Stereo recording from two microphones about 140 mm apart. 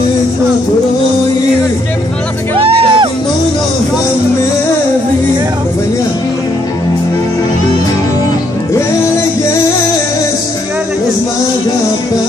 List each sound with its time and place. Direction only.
2.5 s music: 40° right (ahead or behind)